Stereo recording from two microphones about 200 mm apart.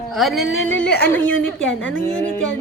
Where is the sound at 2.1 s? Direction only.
5° left (ahead or behind).